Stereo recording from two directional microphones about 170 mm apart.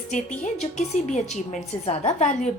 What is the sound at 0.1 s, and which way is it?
A woman's voice, 45° left (ahead or behind).